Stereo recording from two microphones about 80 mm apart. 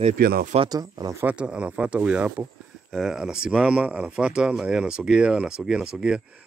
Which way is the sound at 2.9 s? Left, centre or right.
Centre.